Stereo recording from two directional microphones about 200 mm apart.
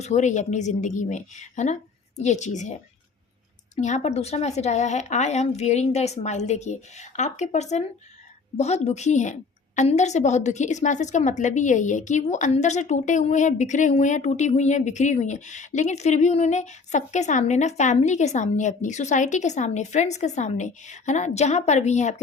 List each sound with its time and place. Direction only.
0.0 s a woman's voice: 35° left (ahead or behind)
3.8 s a woman's voice: 35° left (ahead or behind)